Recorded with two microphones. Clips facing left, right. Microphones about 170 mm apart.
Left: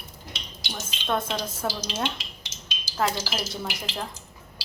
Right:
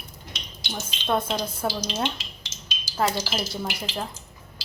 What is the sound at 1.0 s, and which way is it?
Speech, 5° right (ahead or behind).